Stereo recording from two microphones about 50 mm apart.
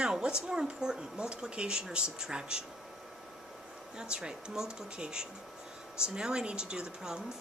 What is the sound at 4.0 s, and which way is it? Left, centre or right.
Speech, centre.